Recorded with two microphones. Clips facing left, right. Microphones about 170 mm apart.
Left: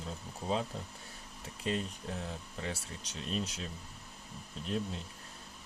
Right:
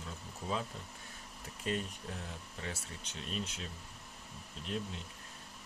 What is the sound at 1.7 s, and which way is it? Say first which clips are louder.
Speech: left 2 dB; 30° left (ahead or behind).